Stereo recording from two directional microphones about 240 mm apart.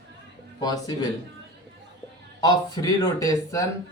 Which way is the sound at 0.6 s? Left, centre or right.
Centre.